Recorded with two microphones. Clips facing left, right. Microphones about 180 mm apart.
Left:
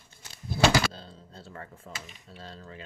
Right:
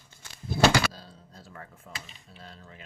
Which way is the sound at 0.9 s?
30° left (ahead or behind).